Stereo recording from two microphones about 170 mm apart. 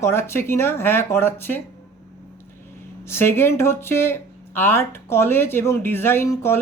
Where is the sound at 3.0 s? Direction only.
15° left (ahead or behind).